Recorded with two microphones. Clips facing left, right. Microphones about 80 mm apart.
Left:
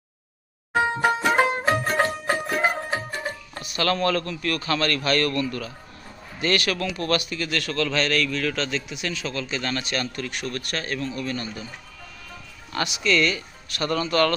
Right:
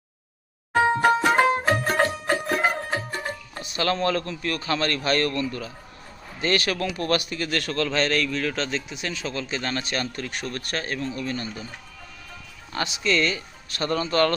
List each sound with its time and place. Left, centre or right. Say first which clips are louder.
1.0 s music: even; centre
3.5 s a man's voice: left 1 dB; right
12.7 s speech: left 1 dB; right